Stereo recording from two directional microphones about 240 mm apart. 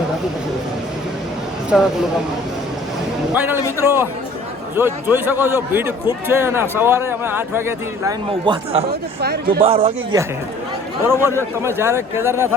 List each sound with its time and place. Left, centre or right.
1.7 s speech: centre
3.8 s a man's voice: centre
8.3 s speech: right
8.9 s speech: right
9.6 s speech: right
11.0 s a man's voice: centre